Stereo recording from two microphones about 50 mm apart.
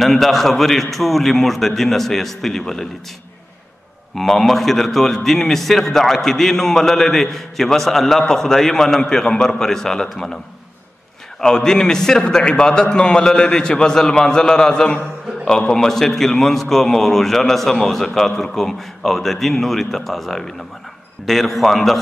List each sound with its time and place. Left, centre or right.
0.0 s a man's voice: centre
4.1 s a man's voice: centre
11.4 s a man's voice: centre